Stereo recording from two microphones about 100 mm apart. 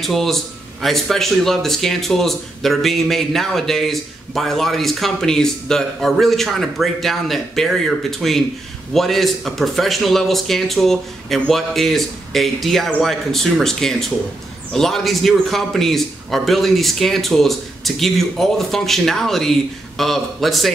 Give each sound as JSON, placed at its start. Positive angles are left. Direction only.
{"t": 0.0, "sound": "speech", "side_deg": 0}